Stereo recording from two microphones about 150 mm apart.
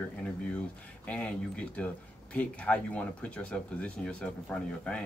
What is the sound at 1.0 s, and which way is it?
Speech, 5° left (ahead or behind).